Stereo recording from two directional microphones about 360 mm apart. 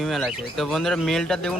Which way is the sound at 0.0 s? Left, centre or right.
Centre.